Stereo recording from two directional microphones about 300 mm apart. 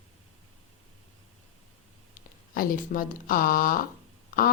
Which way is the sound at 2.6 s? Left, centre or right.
Left.